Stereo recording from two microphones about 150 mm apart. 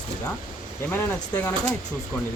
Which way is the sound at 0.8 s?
15° left (ahead or behind).